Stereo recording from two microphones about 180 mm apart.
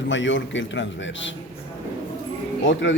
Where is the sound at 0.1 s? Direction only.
90° left.